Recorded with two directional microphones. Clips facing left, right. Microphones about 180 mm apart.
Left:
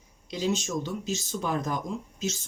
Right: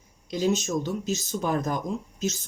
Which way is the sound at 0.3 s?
50° right (ahead or behind).